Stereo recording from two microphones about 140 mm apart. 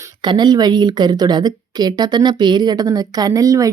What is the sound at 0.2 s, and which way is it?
A woman's voice, 30° right (ahead or behind).